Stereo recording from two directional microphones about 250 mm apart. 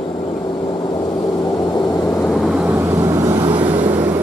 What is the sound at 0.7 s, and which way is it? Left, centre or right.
Vehicle, centre.